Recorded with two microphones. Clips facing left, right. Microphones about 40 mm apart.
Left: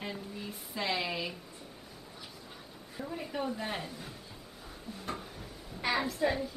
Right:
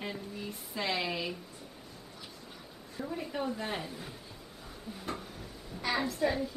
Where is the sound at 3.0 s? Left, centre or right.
Centre.